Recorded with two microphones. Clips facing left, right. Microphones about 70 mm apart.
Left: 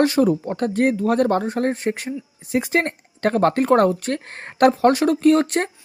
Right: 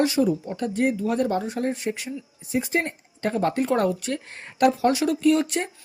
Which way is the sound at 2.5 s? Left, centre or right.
Left.